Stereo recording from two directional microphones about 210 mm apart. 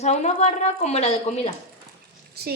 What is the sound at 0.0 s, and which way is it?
A woman's voice, 30° left (ahead or behind).